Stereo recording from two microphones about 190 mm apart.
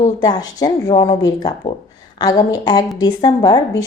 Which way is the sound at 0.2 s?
20° left (ahead or behind).